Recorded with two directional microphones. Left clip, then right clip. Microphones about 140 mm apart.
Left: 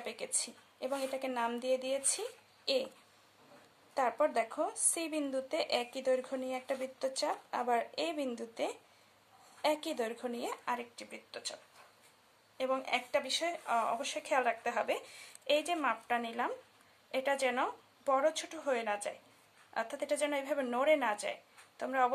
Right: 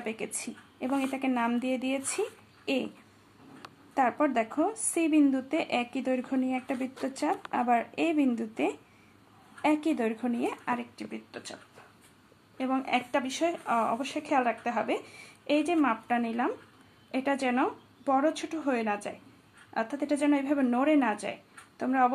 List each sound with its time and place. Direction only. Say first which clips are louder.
0.2 s a woman's voice: right 3 dB; 15° left (ahead or behind)
3.9 s speech: right 5 dB; 15° left (ahead or behind)
12.5 s speech: right 4 dB; 20° left (ahead or behind)
13.7 s speech: right 4 dB; 25° left (ahead or behind)